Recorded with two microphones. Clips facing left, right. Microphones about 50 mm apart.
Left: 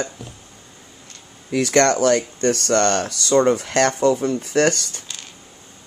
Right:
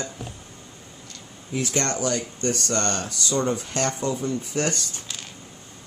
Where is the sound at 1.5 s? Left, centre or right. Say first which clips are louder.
Left 10 dB; left.